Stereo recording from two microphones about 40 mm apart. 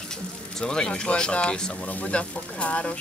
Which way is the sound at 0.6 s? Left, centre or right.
Centre.